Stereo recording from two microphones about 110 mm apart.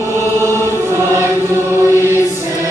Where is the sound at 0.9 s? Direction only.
25° right (ahead or behind).